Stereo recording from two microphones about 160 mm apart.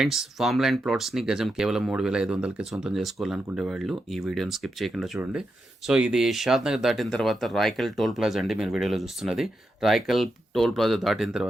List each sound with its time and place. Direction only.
0.0 s speech: centre (ahead or behind)